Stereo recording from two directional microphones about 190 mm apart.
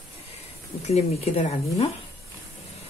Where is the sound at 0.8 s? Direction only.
35° left (ahead or behind).